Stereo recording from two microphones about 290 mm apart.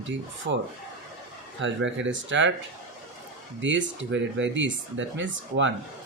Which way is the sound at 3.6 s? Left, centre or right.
Right.